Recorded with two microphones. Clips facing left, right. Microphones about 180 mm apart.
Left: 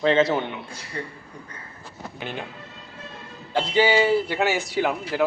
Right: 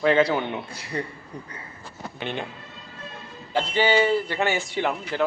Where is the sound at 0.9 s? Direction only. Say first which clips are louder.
Right 4 dB; 30° right (ahead or behind).